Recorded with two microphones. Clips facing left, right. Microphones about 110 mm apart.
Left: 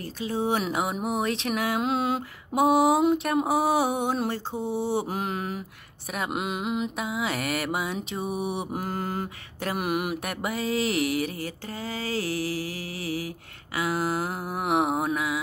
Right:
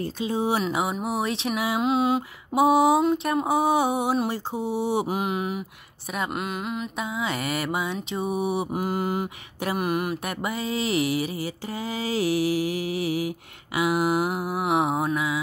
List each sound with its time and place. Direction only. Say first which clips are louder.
0.0 s mantra: right 3 dB; 20° right (ahead or behind)
0.7 s mantra: right 1 dB; centre (ahead or behind)
6.3 s a sound: left 1 dB; 15° left (ahead or behind)
7.0 s mantra: right 1 dB; 5° left (ahead or behind)
9.8 s a sound: right 1 dB; 10° left (ahead or behind)
10.2 s mantra: even; centre (ahead or behind)